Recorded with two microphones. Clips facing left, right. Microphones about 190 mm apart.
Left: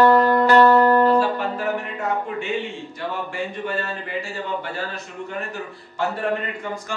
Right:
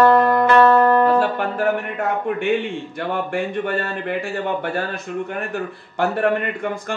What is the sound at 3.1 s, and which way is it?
Speech, 55° right (ahead or behind).